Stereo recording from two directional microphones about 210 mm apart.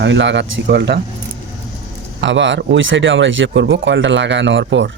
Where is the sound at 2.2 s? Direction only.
60° right (ahead or behind).